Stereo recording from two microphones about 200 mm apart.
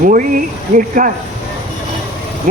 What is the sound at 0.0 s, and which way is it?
Speech, 45° right (ahead or behind).